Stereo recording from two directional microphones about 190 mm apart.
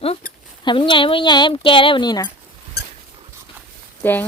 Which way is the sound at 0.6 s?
25° left (ahead or behind).